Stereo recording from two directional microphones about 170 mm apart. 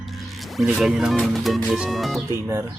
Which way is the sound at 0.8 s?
5° right (ahead or behind).